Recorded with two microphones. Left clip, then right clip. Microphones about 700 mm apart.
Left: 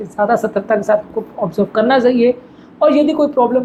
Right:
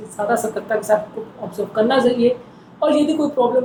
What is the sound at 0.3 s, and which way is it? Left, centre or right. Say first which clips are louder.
Speech: left 3 dB; left.